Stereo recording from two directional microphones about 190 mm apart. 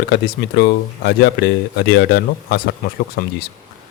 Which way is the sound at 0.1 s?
60° left (ahead or behind).